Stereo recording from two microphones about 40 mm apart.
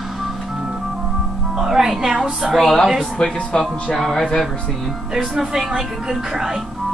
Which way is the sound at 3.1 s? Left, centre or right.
Centre.